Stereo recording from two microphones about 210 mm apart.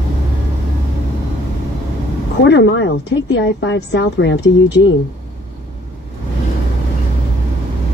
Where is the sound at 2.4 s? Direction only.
60° left (ahead or behind).